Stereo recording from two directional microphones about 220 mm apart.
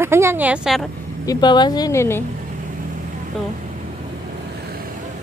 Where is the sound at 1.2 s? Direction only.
20° left (ahead or behind).